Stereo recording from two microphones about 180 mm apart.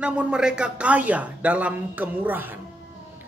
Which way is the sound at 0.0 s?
5° right (ahead or behind).